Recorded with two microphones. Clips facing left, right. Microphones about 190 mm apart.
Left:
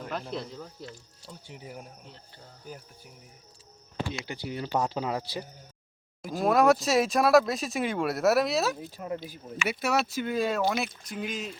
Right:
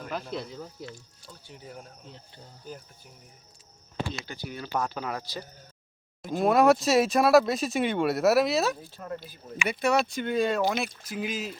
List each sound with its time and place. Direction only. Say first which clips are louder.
0.1 s speech: right 1 dB; centre (ahead or behind)
1.3 s speech: left 2 dB; 15° left (ahead or behind)
4.1 s speech: left 3 dB; 25° left (ahead or behind)
6.2 s speech: right 1 dB; centre (ahead or behind)
8.8 s speech: left 3 dB; 15° left (ahead or behind)
9.6 s speech: right 3 dB; 5° left (ahead or behind)